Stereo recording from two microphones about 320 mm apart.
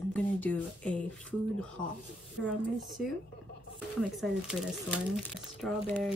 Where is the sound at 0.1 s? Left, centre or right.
Centre.